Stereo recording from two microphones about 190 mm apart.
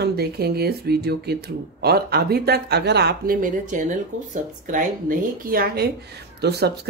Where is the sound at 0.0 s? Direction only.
55° right (ahead or behind).